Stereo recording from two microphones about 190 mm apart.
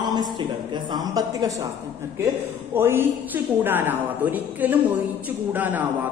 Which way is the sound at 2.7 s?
10° right (ahead or behind).